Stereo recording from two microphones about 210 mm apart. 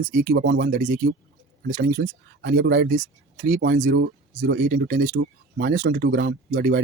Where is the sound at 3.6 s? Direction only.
55° right (ahead or behind).